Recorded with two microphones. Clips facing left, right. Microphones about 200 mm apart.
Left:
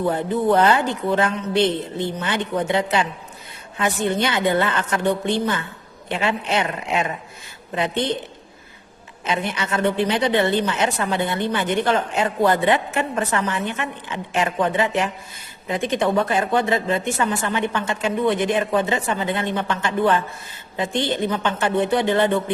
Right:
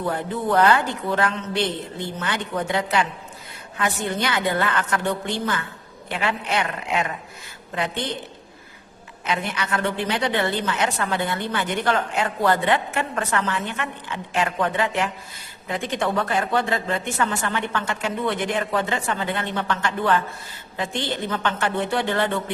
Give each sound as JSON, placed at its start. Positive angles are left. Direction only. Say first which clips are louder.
{"t": 0.0, "sound": "speech", "louder": "left 5 dB", "side_deg": 25}
{"t": 9.2, "sound": "speech", "louder": "left 2 dB", "side_deg": 25}